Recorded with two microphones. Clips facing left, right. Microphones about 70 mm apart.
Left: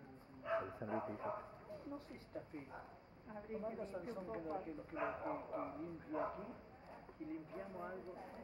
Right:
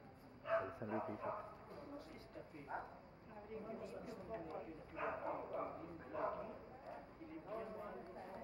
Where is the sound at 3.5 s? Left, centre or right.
Left.